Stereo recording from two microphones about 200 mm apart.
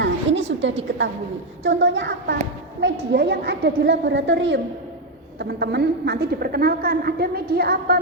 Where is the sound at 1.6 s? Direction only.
65° right (ahead or behind).